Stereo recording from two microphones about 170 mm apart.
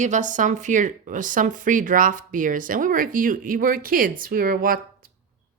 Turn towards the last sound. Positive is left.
turn(degrees=-55)  # may be behind; listen again after turning